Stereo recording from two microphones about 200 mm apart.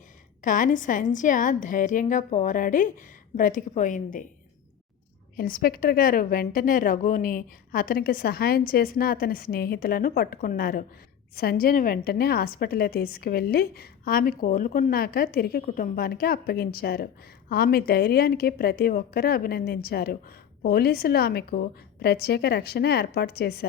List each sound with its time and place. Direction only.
0.4 s a woman's voice: 40° left (ahead or behind)
5.4 s a woman's voice: 45° left (ahead or behind)